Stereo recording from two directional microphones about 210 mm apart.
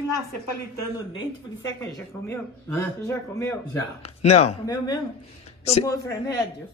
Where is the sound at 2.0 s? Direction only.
10° left (ahead or behind).